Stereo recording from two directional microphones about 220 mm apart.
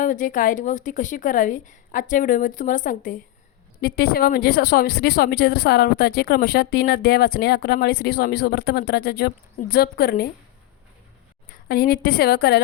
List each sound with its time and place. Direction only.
0.0 s a woman's voice: 35° left (ahead or behind)
11.4 s a woman's voice: 40° left (ahead or behind)